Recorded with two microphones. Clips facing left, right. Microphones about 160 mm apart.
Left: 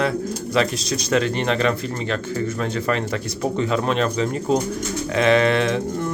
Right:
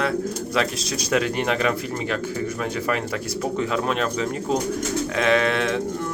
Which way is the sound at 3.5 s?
5° right (ahead or behind).